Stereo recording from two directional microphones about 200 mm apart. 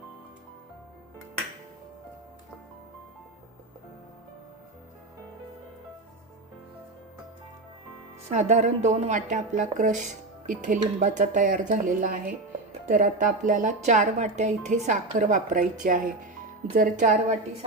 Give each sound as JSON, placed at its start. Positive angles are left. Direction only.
{"t": 8.3, "sound": "speech", "side_deg": -35}